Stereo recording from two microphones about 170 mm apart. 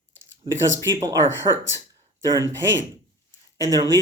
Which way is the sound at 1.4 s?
35° right (ahead or behind).